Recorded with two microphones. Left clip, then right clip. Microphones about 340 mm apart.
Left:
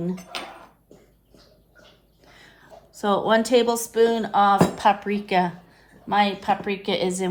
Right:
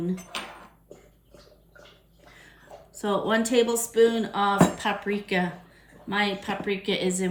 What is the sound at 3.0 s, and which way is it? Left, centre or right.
A woman's voice, left.